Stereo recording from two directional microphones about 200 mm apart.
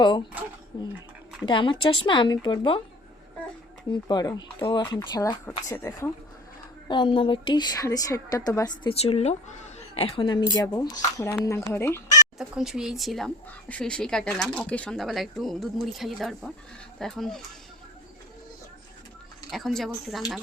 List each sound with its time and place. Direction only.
0.0 s a sound: 20° left (ahead or behind)
0.7 s a woman's voice: 25° left (ahead or behind)
3.9 s a woman's voice: 20° left (ahead or behind)
12.4 s speech: centre (ahead or behind)
19.5 s speech: centre (ahead or behind)